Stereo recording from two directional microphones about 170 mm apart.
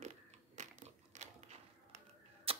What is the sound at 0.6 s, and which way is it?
Crushing, 45° right (ahead or behind).